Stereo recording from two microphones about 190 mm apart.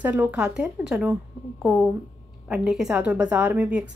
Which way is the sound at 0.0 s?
10° right (ahead or behind).